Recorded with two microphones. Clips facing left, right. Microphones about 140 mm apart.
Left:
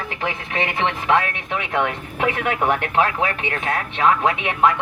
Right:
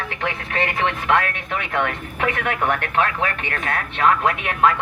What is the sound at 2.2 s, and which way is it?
Speech, 20° left (ahead or behind).